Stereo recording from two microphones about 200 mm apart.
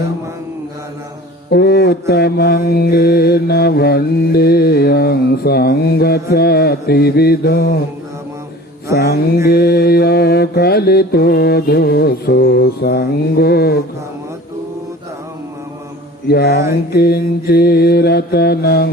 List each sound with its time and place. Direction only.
1.5 s mantra: 50° left (ahead or behind)
9.0 s mantra: 55° left (ahead or behind)
16.2 s mantra: 55° left (ahead or behind)